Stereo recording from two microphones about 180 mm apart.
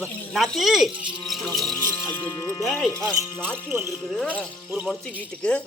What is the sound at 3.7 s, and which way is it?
Speech, 15° right (ahead or behind).